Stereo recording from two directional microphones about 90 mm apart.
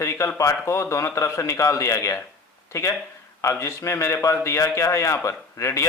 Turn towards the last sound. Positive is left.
turn(degrees=35)  # may be behind; listen again after turning